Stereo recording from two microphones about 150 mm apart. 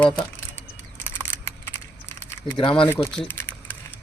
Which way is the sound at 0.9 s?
15° left (ahead or behind).